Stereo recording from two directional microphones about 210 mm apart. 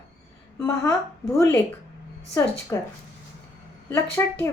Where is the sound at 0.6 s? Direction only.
15° left (ahead or behind).